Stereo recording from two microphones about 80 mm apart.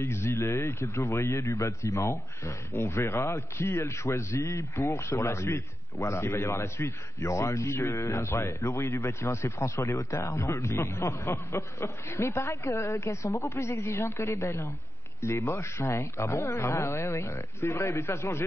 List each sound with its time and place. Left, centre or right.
0.0 s speech: left